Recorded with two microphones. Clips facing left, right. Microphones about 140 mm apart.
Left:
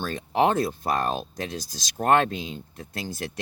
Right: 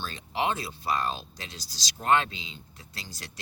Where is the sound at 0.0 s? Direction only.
50° left (ahead or behind).